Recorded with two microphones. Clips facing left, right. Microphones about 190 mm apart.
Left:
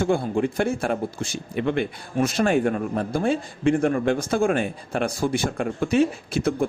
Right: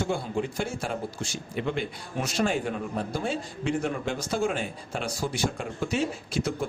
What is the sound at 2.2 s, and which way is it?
A man's voice, 55° left (ahead or behind).